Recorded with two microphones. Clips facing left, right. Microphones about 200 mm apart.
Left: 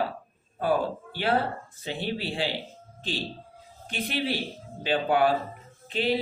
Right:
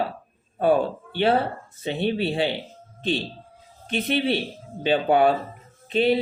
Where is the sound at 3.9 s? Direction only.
25° right (ahead or behind).